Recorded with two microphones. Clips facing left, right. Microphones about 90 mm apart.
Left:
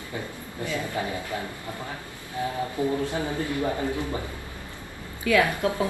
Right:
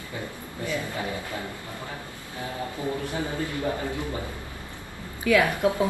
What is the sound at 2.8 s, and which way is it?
Speech, 20° left (ahead or behind).